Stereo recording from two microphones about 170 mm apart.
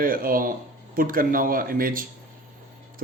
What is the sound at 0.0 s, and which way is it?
Speech, 55° right (ahead or behind).